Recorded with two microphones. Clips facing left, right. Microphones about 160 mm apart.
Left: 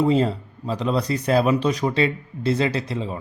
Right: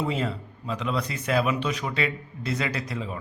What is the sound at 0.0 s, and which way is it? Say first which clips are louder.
A man's voice: left 9 dB; 35° left (ahead or behind).